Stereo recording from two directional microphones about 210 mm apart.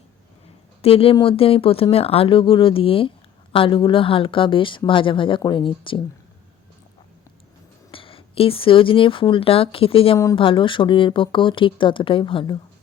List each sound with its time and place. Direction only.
0.8 s speech: 25° left (ahead or behind)
7.9 s speech: 25° left (ahead or behind)